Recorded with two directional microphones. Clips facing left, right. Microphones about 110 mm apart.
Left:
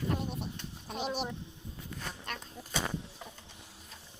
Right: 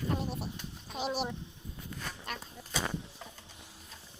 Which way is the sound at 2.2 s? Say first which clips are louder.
Even; 5° right (ahead or behind).